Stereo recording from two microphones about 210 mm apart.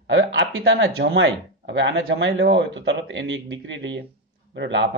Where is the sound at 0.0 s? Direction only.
60° right (ahead or behind).